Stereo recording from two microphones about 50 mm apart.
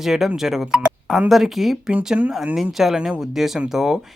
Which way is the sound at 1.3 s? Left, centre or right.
Centre.